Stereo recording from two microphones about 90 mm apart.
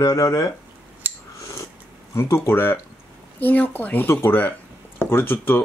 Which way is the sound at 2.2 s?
30° left (ahead or behind).